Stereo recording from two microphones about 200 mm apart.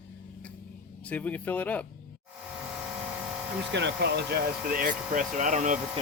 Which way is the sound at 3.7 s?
60° right (ahead or behind).